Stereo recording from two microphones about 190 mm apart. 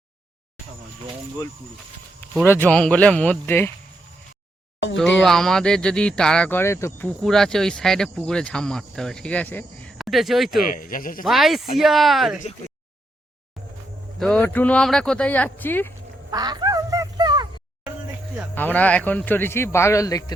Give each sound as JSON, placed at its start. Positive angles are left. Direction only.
{"t": 2.5, "sound": "speech", "side_deg": 10}
{"t": 5.2, "sound": "speech", "side_deg": 0}
{"t": 7.2, "sound": "speech", "side_deg": 5}
{"t": 10.6, "sound": "speech", "side_deg": 45}
{"t": 11.3, "sound": "speech", "side_deg": 0}
{"t": 14.2, "sound": "speech", "side_deg": 5}
{"t": 16.3, "sound": "quack", "side_deg": -20}
{"t": 18.5, "sound": "speech", "side_deg": 10}